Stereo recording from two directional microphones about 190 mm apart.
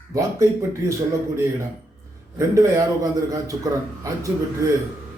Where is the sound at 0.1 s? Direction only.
15° right (ahead or behind).